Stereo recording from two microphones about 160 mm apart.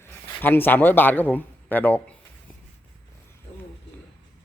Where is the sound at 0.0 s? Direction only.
15° left (ahead or behind).